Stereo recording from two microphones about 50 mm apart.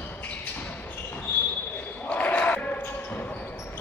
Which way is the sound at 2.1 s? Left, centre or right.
Left.